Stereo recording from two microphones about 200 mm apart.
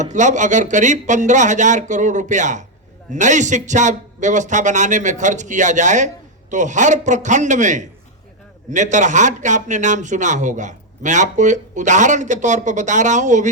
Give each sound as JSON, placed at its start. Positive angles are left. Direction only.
{"t": 0.0, "sound": "speech", "side_deg": -35}